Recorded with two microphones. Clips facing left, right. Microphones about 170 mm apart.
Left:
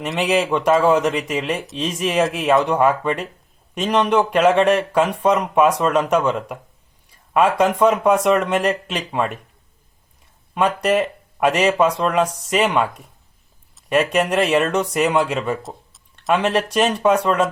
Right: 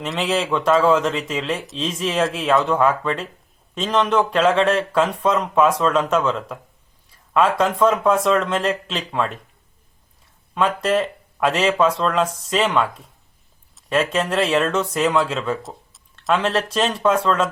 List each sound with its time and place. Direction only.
0.2 s speech: 15° left (ahead or behind)
10.5 s speech: 15° left (ahead or behind)
13.9 s speech: 15° left (ahead or behind)
15.6 s a sound: centre (ahead or behind)
16.3 s speech: 10° left (ahead or behind)